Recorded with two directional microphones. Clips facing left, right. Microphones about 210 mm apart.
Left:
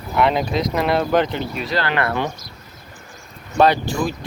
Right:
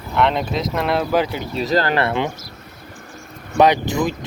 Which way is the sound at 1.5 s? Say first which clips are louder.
Right 4 dB; 40° right (ahead or behind).